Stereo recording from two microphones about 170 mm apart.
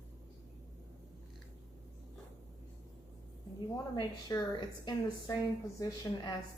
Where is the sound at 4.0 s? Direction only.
20° left (ahead or behind).